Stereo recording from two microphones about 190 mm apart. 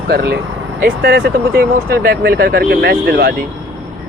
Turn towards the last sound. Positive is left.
turn(degrees=-60)  # may be behind; listen again after turning